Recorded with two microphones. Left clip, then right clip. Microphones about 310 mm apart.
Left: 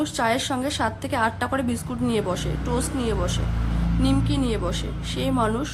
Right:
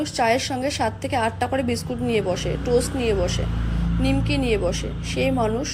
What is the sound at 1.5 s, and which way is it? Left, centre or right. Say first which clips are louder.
Speech: right 2 dB; left.